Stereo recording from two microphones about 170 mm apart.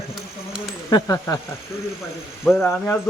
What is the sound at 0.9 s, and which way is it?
Speech, 20° left (ahead or behind).